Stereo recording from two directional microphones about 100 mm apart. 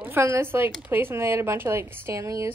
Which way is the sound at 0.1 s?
25° right (ahead or behind).